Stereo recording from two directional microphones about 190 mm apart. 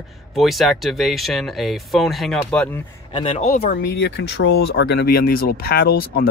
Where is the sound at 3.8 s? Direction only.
60° left (ahead or behind).